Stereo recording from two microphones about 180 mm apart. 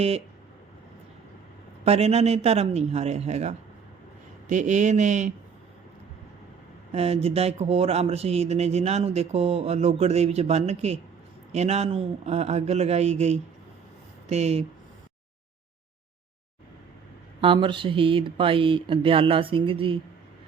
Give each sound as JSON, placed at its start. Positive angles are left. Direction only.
{"t": 1.8, "sound": "speech", "side_deg": -35}
{"t": 6.9, "sound": "speech", "side_deg": -35}
{"t": 17.4, "sound": "speech", "side_deg": -30}